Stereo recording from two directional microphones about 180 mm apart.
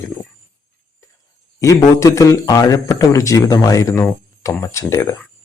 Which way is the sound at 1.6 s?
20° left (ahead or behind).